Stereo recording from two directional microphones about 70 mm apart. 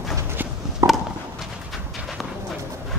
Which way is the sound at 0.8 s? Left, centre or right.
Right.